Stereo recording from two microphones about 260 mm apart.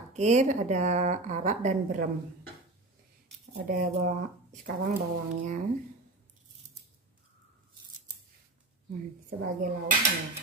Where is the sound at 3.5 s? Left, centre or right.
Right.